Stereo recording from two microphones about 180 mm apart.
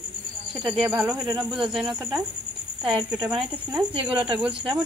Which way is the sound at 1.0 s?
15° right (ahead or behind).